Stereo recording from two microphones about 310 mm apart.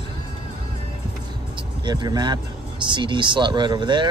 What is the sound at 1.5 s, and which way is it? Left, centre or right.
Speech, centre.